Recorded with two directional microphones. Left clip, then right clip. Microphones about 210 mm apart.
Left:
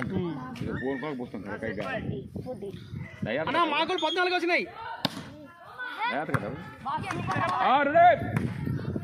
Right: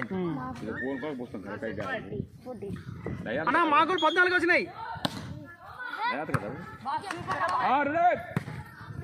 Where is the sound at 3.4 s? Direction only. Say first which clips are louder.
Right 3 dB; 20° right (ahead or behind).